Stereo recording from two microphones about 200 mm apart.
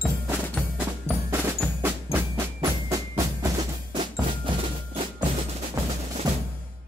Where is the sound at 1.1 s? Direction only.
30° left (ahead or behind).